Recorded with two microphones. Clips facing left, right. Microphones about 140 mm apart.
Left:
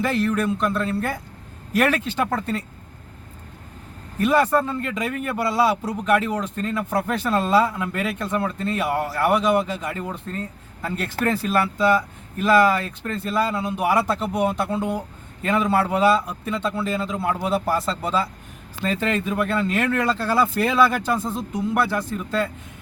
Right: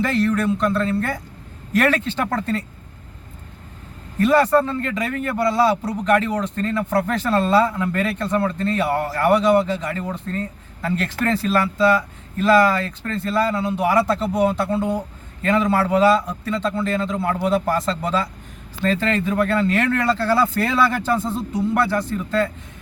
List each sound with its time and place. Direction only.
0.0 s a man's voice: 10° left (ahead or behind)
4.2 s a man's voice: 10° left (ahead or behind)